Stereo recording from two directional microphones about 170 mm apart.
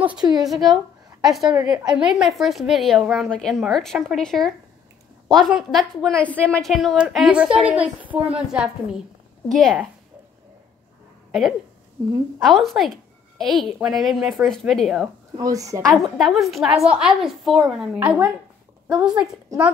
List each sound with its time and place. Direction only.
0.2 s a woman's voice: 25° right (ahead or behind)
0.5 s a woman's voice: centre (ahead or behind)
1.5 s a woman's voice: 20° right (ahead or behind)
2.0 s a woman's voice: centre (ahead or behind)
12.4 s a woman's voice: centre (ahead or behind)
15.3 s a woman's voice: 20° right (ahead or behind)
15.9 s a woman's voice: centre (ahead or behind)